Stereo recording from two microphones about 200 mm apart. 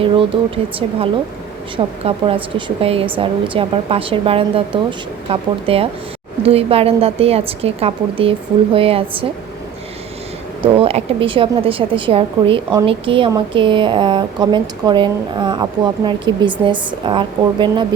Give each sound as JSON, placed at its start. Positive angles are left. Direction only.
{"t": 0.0, "sound": "a woman's voice", "side_deg": -25}
{"t": 10.6, "sound": "a woman's voice", "side_deg": -30}